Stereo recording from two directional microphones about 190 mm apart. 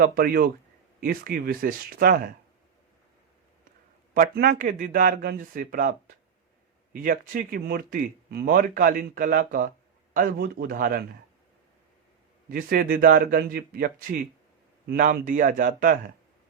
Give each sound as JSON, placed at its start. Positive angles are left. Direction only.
{"t": 0.0, "sound": "speech", "side_deg": -50}
{"t": 4.1, "sound": "speech", "side_deg": -45}
{"t": 12.5, "sound": "speech", "side_deg": -50}